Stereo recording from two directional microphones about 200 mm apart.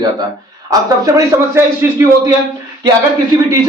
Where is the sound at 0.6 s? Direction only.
15° right (ahead or behind).